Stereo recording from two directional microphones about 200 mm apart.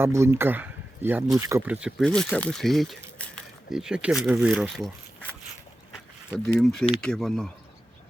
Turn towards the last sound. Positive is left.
turn(degrees=0)  # may be behind; listen again after turning